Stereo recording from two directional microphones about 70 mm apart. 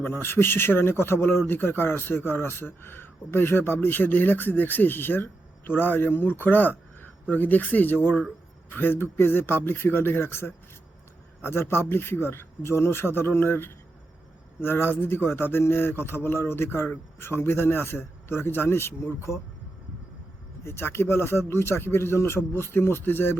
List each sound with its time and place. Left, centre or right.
0.0 s a man's voice: left
20.7 s speech: left